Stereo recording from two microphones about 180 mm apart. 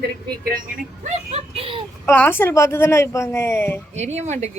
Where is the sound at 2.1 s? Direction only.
10° left (ahead or behind).